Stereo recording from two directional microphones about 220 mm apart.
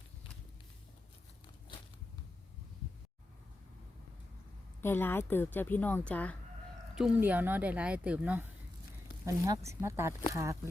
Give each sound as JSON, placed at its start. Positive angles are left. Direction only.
{"t": 4.8, "sound": "a woman's voice", "side_deg": 10}
{"t": 6.9, "sound": "speech", "side_deg": -5}